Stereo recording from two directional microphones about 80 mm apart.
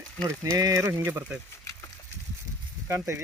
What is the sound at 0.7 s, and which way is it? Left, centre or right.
Speech, right.